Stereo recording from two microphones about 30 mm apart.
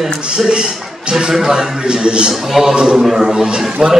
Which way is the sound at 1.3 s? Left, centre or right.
Centre.